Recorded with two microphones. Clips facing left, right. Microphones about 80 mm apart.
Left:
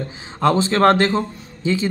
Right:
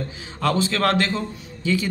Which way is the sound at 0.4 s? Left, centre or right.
Left.